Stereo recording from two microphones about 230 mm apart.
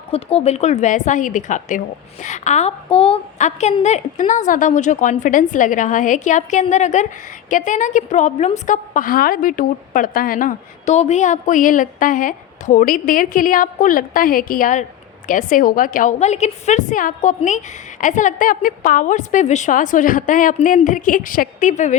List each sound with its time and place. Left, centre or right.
0.1 s a woman's voice: left